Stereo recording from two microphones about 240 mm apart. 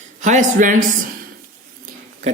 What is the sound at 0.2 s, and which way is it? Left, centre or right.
Speech, right.